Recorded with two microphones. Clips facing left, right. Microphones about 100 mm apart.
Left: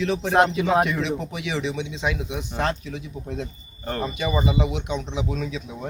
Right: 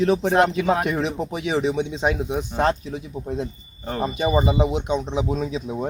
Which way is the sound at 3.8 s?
15° right (ahead or behind).